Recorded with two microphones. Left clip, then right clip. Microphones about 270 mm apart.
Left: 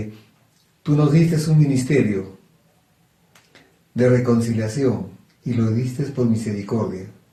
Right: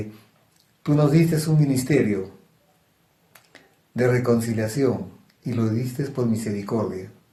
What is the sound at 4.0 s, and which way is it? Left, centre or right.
Speech, right.